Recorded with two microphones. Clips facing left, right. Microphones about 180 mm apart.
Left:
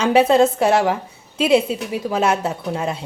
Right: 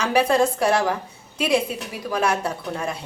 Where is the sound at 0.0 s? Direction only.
25° left (ahead or behind).